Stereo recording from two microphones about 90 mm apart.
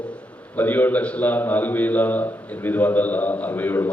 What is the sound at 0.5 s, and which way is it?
A man's voice, 20° left (ahead or behind).